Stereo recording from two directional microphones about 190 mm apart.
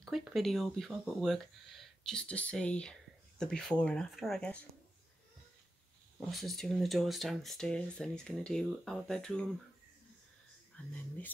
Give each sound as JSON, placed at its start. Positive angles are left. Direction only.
{"t": 0.0, "sound": "speech", "side_deg": 0}
{"t": 6.1, "sound": "speech", "side_deg": 0}
{"t": 10.9, "sound": "speech", "side_deg": 10}